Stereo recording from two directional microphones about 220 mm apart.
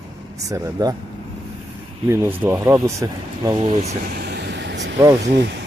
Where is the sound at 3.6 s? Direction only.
30° right (ahead or behind).